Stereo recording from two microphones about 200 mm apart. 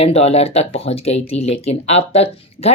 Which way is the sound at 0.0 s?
30° left (ahead or behind).